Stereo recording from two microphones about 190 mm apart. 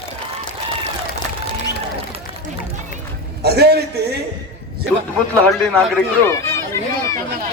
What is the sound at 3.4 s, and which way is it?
Speech, 60° right (ahead or behind).